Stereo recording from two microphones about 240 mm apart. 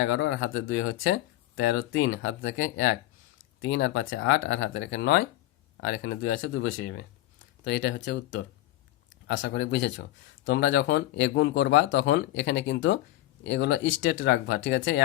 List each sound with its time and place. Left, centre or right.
0.0 s speech: left